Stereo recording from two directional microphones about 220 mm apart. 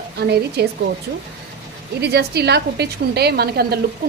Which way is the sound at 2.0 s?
50° right (ahead or behind).